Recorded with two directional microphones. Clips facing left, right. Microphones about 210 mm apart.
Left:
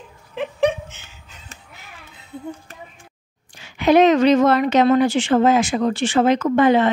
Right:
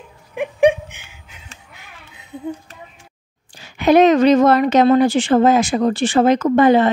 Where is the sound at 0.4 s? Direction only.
10° right (ahead or behind).